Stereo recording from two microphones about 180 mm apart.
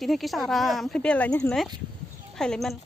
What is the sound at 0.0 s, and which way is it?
Speech, centre (ahead or behind).